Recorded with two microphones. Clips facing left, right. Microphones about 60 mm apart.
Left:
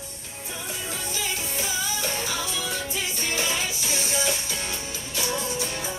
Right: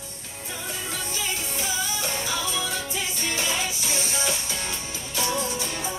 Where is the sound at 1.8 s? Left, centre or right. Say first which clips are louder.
Even; left.